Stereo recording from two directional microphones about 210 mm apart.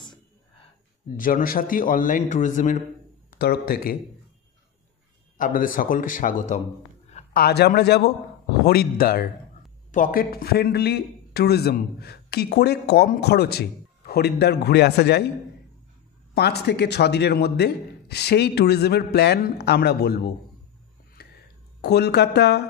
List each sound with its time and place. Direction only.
1.1 s a man's voice: 40° left (ahead or behind)
5.4 s a man's voice: 40° left (ahead or behind)
7.3 s a man's voice: 50° left (ahead or behind)
16.3 s a man's voice: 50° left (ahead or behind)
21.2 s a sound: 50° left (ahead or behind)
21.8 s a man's voice: 50° left (ahead or behind)